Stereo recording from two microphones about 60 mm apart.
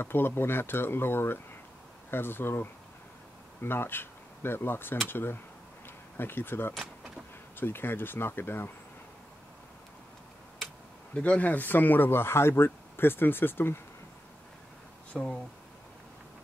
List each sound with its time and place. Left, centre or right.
0.0 s speech: left
11.1 s speech: left
15.1 s speech: centre